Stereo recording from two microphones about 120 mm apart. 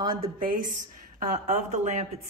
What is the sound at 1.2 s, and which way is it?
Speech, 90° right.